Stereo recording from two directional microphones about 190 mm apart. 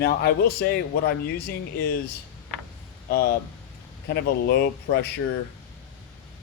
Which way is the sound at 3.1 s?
55° left (ahead or behind).